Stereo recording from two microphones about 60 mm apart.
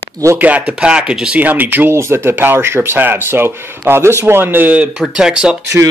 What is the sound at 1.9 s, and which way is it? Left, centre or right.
Speech, right.